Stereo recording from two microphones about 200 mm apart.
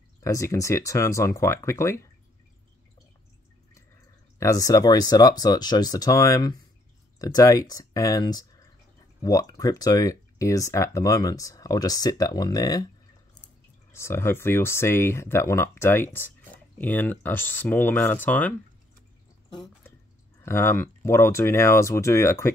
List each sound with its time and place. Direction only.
0.2 s speech: 15° left (ahead or behind)
4.4 s speech: 15° left (ahead or behind)
13.9 s speech: 15° left (ahead or behind)
20.4 s speech: 15° left (ahead or behind)